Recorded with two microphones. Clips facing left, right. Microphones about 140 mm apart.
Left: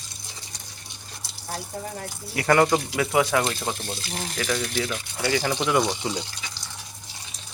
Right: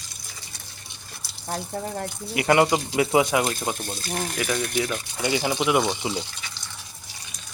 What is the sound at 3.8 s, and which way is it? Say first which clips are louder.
Speech: right 3 dB; 45° right (ahead or behind).